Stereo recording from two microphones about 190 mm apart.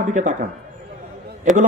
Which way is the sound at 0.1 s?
40° right (ahead or behind).